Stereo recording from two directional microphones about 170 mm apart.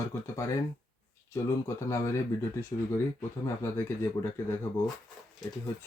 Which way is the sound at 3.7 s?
15° left (ahead or behind).